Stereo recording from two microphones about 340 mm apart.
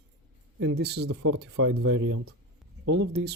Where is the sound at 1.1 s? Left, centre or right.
Right.